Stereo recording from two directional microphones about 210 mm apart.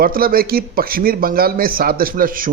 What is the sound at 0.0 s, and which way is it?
Speech, 45° right (ahead or behind).